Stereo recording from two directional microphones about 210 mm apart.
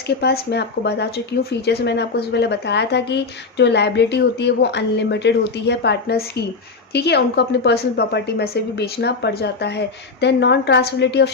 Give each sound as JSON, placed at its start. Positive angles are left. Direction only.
{"t": 0.2, "sound": "a woman's voice", "side_deg": 50}